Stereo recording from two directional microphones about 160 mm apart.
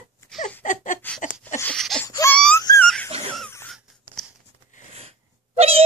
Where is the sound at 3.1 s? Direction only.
40° right (ahead or behind).